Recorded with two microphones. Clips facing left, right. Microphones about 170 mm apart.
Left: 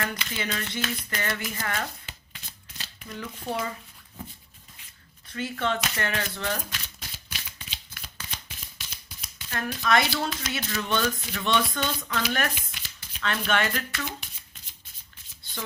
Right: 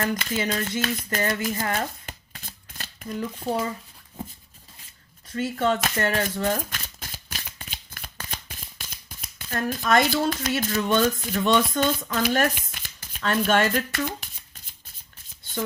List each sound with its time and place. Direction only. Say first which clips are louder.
0.2 s speech: right 6 dB; 40° right (ahead or behind)
2.0 s shuffling cards: right 5 dB; 45° right (ahead or behind)
5.3 s speech: right 5 dB; 40° right (ahead or behind)